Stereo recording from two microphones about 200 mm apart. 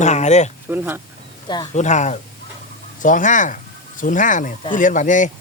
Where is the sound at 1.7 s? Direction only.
35° left (ahead or behind).